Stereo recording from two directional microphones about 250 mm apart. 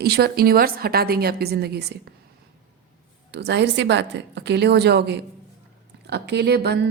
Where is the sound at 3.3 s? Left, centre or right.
Right.